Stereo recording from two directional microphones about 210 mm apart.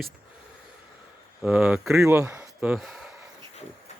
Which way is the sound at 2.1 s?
15° right (ahead or behind).